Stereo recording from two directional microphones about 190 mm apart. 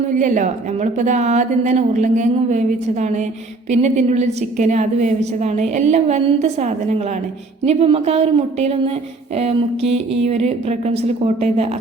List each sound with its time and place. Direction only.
0.2 s a woman's voice: 40° right (ahead or behind)